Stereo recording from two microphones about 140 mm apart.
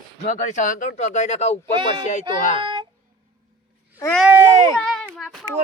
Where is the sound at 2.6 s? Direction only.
35° right (ahead or behind).